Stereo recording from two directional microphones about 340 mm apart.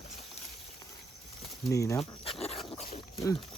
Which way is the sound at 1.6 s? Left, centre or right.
Centre.